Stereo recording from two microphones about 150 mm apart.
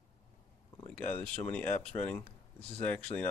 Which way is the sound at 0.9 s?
10° left (ahead or behind).